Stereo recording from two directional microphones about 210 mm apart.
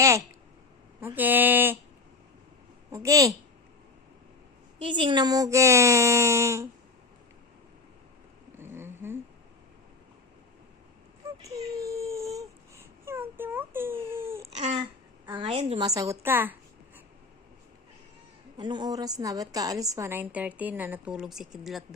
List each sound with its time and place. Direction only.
1.0 s a woman's voice: 10° right (ahead or behind)
2.9 s a woman's voice: 15° right (ahead or behind)
4.8 s a woman's voice: 25° right (ahead or behind)
8.5 s a sound: 10° right (ahead or behind)
11.4 s a sound: 15° right (ahead or behind)
14.6 s babbling: 30° right (ahead or behind)
15.3 s a woman's voice: 25° right (ahead or behind)
16.0 s a woman's voice: 10° right (ahead or behind)
18.5 s a woman's voice: 20° right (ahead or behind); by 21.8 s centre (ahead or behind)